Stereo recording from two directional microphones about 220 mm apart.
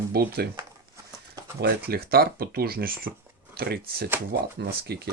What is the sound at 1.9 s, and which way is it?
Speech, 45° right (ahead or behind).